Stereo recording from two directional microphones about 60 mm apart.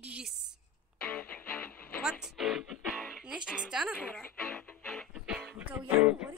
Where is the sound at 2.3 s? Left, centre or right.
Centre.